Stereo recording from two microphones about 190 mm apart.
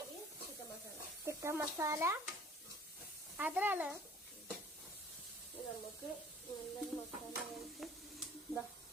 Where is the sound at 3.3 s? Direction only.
10° right (ahead or behind).